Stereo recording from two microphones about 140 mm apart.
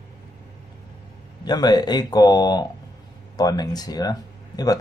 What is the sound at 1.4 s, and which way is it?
A man's voice, 30° left (ahead or behind).